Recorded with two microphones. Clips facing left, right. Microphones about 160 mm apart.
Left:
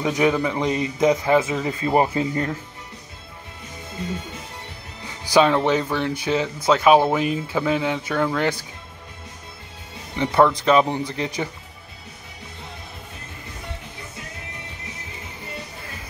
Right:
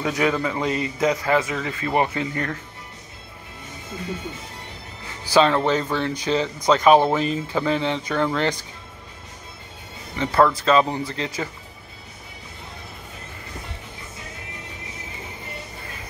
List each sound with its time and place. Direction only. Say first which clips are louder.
0.0 s a man's voice: left 2 dB; 15° left (ahead or behind)
5.3 s speech: left 1 dB; 10° left (ahead or behind)
10.1 s speech: left 1 dB; 15° left (ahead or behind)